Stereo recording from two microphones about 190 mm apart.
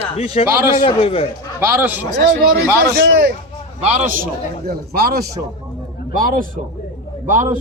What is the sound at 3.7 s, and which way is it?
A man's voice, 35° right (ahead or behind).